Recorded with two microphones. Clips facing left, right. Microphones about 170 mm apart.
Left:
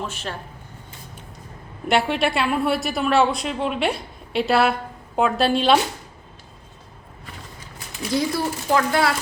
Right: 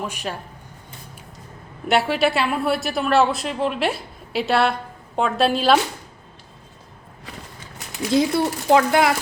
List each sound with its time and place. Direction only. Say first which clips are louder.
0.0 s speech: right 2 dB; 10° right (ahead or behind)
1.9 s a woman's voice: right 1 dB; centre (ahead or behind)
8.1 s speech: right 4 dB; 20° right (ahead or behind)